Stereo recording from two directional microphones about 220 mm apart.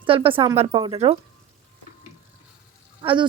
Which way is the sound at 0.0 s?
25° right (ahead or behind).